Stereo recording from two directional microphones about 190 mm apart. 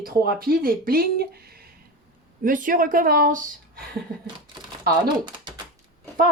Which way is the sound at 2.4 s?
45° right (ahead or behind).